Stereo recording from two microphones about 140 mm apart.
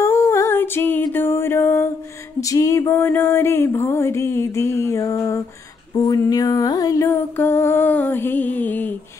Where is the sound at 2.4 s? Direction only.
25° left (ahead or behind).